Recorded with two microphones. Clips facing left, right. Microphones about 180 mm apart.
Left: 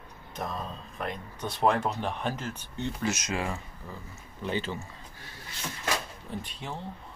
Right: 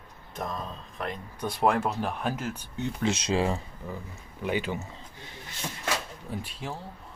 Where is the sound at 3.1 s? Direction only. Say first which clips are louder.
Right 7 dB; 30° right (ahead or behind).